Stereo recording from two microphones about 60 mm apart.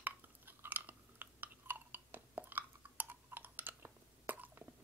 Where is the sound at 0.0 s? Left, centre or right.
Right.